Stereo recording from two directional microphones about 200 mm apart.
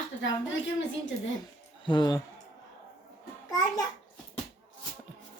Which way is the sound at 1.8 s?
20° left (ahead or behind).